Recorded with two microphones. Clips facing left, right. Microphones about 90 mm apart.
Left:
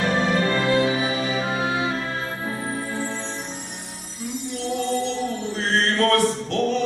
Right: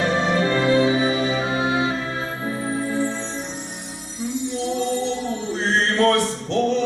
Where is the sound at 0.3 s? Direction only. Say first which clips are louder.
Right 2 dB; 15° right (ahead or behind).